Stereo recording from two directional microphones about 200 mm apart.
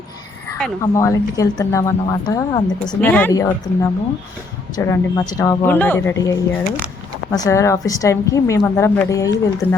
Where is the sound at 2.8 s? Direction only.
5° left (ahead or behind).